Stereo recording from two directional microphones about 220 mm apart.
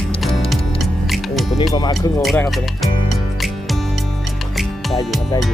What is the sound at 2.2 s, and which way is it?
Speech, centre (ahead or behind).